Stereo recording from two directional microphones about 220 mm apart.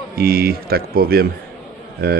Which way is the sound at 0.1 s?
45° right (ahead or behind).